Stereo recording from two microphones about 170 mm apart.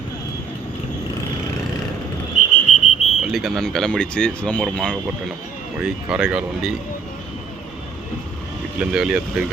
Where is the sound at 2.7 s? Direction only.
40° left (ahead or behind).